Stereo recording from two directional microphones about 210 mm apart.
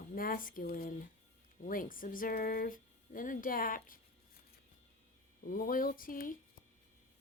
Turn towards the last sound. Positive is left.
turn(degrees=40)  # may be behind; listen again after turning